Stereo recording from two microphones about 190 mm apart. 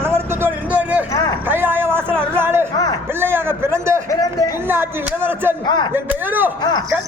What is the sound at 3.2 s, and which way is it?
Speech, 10° right (ahead or behind).